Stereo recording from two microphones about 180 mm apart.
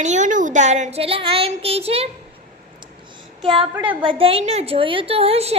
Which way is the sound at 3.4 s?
30° right (ahead or behind).